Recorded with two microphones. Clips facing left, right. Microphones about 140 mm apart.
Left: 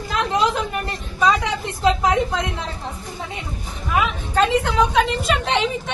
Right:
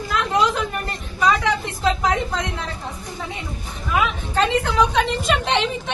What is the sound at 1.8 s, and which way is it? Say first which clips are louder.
Speech: left 4 dB; 25° left (ahead or behind).